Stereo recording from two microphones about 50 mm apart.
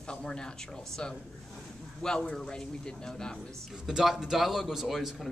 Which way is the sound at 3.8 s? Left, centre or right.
Centre.